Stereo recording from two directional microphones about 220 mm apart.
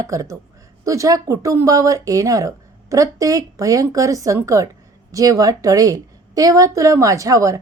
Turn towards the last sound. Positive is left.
turn(degrees=-15)  # may be behind; listen again after turning